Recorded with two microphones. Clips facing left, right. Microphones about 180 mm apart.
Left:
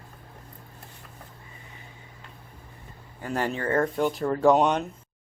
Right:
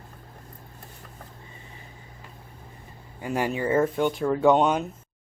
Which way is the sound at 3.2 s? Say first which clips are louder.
Right 2 dB; 10° right (ahead or behind).